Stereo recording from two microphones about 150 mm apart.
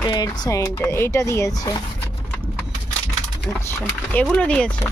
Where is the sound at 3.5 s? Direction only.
15° left (ahead or behind).